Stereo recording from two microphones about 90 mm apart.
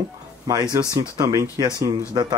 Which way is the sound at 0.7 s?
45° right (ahead or behind).